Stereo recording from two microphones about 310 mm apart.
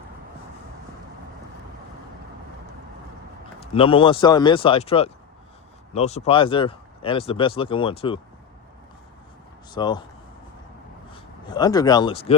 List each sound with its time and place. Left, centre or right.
3.6 s speech: centre
9.7 s speech: centre
11.1 s speech: centre